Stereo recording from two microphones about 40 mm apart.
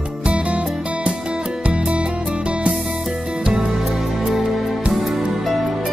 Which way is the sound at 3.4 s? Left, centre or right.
Right.